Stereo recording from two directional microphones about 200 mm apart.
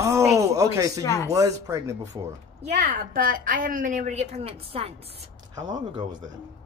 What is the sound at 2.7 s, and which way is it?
A woman's voice, 45° right (ahead or behind).